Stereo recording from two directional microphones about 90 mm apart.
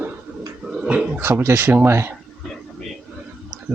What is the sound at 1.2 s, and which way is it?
Speech, 30° right (ahead or behind).